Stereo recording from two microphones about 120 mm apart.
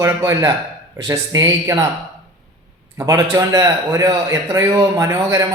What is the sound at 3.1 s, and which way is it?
A man's voice, 30° right (ahead or behind).